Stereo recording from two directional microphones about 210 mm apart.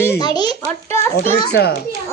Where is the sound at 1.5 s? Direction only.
50° left (ahead or behind).